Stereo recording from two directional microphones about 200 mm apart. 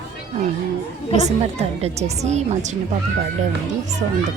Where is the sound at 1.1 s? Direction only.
35° right (ahead or behind).